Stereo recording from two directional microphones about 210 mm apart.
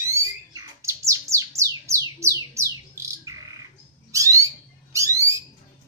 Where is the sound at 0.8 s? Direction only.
15° right (ahead or behind).